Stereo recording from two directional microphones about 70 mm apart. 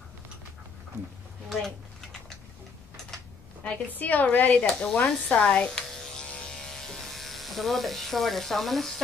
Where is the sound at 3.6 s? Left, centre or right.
Left.